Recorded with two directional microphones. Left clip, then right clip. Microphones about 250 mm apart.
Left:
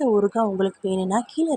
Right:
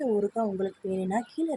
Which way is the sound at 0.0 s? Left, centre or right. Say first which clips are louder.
Left 7 dB; centre.